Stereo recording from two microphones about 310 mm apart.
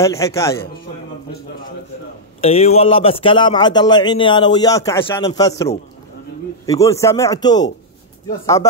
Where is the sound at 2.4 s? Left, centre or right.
Centre.